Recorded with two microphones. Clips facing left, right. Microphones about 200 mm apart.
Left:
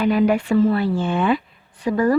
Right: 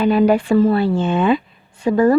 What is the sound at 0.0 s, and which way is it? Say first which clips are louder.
A woman's voice: right 3 dB; 30° right (ahead or behind).